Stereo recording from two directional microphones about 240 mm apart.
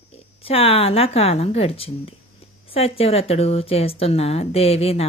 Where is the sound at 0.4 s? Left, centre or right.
Left.